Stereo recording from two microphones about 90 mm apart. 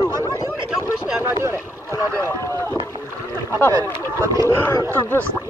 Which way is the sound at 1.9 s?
30° left (ahead or behind).